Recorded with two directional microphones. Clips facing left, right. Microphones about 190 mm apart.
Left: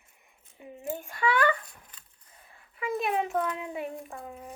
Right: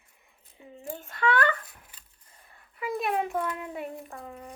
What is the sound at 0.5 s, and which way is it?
Speech, 20° left (ahead or behind).